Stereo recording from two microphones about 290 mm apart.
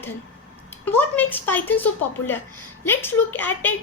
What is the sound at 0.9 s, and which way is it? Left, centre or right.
A woman's voice, centre.